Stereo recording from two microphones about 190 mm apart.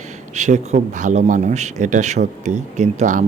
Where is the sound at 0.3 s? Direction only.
40° right (ahead or behind).